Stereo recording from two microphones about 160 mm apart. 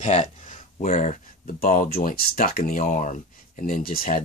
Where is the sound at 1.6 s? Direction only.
60° left (ahead or behind).